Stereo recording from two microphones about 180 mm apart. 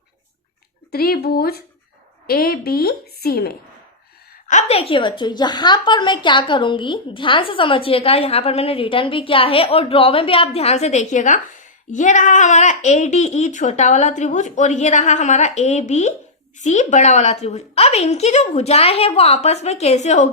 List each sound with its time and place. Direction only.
0.9 s a woman's voice: 55° left (ahead or behind)
4.4 s a woman's voice: 40° left (ahead or behind)